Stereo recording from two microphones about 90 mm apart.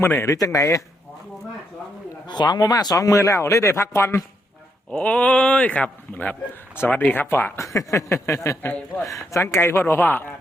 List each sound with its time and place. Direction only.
0.0 s a man's voice: 25° left (ahead or behind)
0.3 s speech: 40° left (ahead or behind)
2.2 s speech: 55° left (ahead or behind); by 4.2 s 30° left (ahead or behind)
4.9 s a man's voice: 15° left (ahead or behind)